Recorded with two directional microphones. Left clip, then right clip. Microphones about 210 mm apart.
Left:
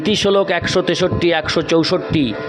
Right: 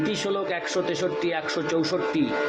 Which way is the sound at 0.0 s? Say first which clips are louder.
Left 11 dB; 50° left (ahead or behind).